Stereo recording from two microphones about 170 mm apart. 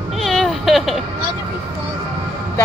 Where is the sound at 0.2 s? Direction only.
Centre (ahead or behind).